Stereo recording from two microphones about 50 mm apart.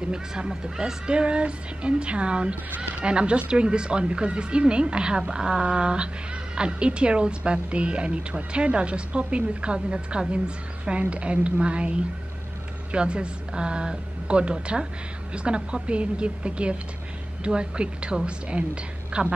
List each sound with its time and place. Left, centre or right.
0.1 s a woman's voice: centre